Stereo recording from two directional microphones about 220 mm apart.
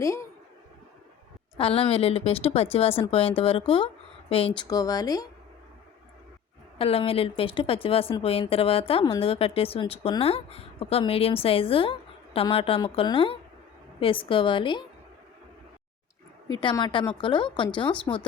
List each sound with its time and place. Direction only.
0.0 s speech: 15° left (ahead or behind)
1.5 s a woman's voice: 25° left (ahead or behind)
6.7 s a woman's voice: 25° left (ahead or behind)
16.5 s a woman's voice: 20° left (ahead or behind)